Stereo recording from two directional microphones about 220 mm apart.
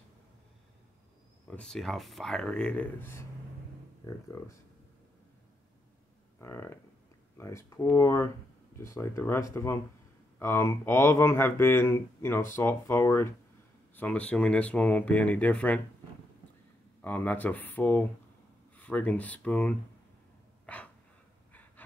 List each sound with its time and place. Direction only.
1.5 s speech: 5° left (ahead or behind)
6.4 s speech: 10° left (ahead or behind)
17.0 s speech: 5° left (ahead or behind)
20.6 s dog: 5° left (ahead or behind)
21.8 s pant: 5° left (ahead or behind)